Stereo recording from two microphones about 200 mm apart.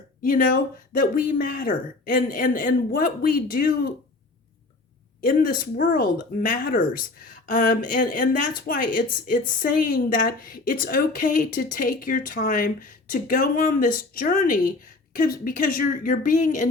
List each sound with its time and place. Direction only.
0.2 s a woman's voice: 40° left (ahead or behind)
5.2 s a woman's voice: 45° left (ahead or behind)